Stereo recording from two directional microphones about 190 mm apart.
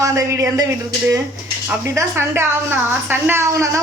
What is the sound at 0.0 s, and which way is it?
Speech, 15° right (ahead or behind).